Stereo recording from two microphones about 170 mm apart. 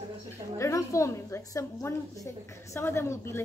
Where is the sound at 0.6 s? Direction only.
20° left (ahead or behind).